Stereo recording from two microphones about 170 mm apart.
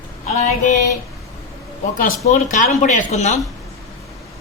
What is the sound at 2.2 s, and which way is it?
Speech, 45° left (ahead or behind).